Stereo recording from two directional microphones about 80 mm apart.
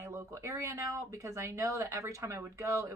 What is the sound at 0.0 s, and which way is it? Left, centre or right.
Speech, right.